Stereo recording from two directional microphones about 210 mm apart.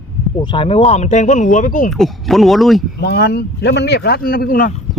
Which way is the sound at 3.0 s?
50° left (ahead or behind).